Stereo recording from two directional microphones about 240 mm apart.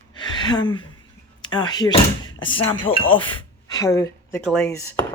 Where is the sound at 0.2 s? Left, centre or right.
Centre.